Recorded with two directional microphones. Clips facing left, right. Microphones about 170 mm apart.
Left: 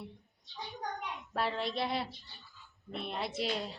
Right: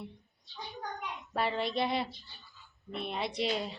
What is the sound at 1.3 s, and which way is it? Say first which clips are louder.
A woman's voice: right 2 dB; centre (ahead or behind).